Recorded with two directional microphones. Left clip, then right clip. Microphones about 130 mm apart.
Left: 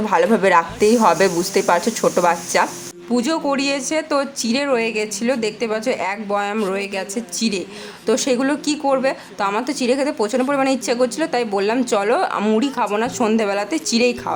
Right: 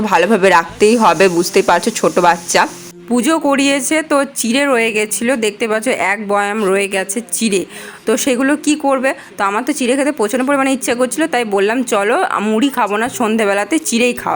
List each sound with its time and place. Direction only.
0.0 s a woman's voice: 30° right (ahead or behind); by 12.5 s 15° right (ahead or behind)
12.5 s a woman's voice: 25° right (ahead or behind)